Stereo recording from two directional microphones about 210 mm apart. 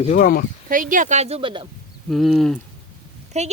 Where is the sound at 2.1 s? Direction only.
Centre (ahead or behind).